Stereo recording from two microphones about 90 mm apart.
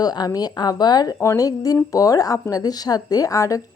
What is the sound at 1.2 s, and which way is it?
A woman's voice, 35° left (ahead or behind).